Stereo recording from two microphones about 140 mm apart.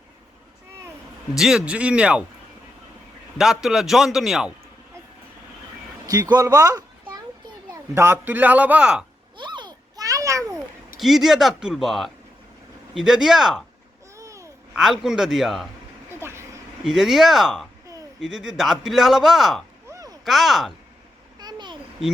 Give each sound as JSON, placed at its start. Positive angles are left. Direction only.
{"t": 1.4, "sound": "a man's voice", "side_deg": -5}
{"t": 3.3, "sound": "a man's voice", "side_deg": -5}
{"t": 6.1, "sound": "speech", "side_deg": -30}
{"t": 7.9, "sound": "a man's voice", "side_deg": -15}
{"t": 9.4, "sound": "children playing", "side_deg": -35}
{"t": 10.5, "sound": "a man's voice", "side_deg": 0}
{"t": 14.2, "sound": "babbling", "side_deg": -20}
{"t": 14.8, "sound": "a man's voice", "side_deg": -5}
{"t": 16.0, "sound": "vehicle", "side_deg": -20}
{"t": 16.8, "sound": "a man's voice", "side_deg": -5}
{"t": 19.9, "sound": "a sound", "side_deg": -25}
{"t": 20.2, "sound": "a man's voice", "side_deg": 0}
{"t": 21.3, "sound": "a sound", "side_deg": -30}